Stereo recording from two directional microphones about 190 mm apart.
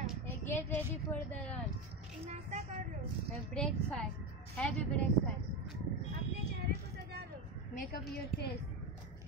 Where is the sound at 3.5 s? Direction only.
5° left (ahead or behind).